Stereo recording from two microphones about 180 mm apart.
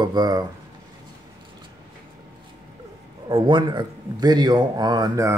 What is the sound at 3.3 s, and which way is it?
Speech, 25° right (ahead or behind).